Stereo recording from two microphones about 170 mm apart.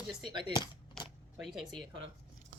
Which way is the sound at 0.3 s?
30° right (ahead or behind).